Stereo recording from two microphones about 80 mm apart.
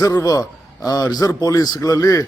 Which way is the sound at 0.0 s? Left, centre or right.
Left.